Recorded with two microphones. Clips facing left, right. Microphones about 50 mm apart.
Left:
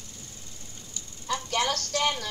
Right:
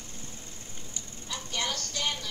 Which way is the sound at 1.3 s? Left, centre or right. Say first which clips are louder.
Left 6 dB; left.